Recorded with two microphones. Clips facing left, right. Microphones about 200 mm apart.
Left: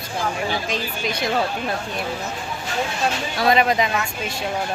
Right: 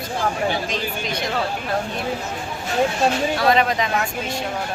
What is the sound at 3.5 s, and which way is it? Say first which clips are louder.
Speech: left 3 dB; 10° left (ahead or behind).